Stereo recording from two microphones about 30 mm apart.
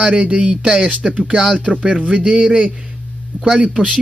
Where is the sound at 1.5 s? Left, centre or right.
Left.